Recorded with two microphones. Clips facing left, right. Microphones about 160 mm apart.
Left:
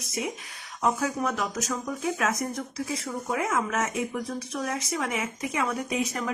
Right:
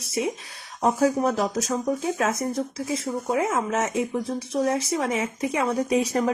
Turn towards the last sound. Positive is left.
turn(degrees=-35)  # may be behind; listen again after turning